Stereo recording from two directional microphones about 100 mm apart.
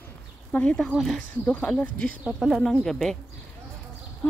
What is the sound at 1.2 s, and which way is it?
Speech, 15° left (ahead or behind).